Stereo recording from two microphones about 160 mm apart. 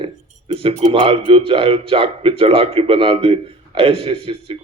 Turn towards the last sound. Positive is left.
turn(degrees=-35)  # may be behind; listen again after turning